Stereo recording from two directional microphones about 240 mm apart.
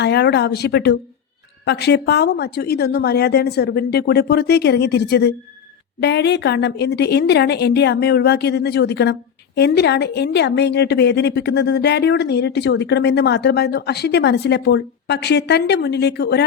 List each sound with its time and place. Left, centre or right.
0.0 s a woman's voice: left